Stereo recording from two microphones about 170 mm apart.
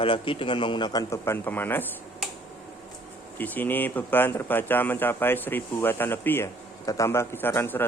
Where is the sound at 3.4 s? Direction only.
10° left (ahead or behind).